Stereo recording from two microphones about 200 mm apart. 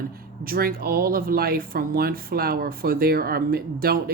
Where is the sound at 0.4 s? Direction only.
45° right (ahead or behind).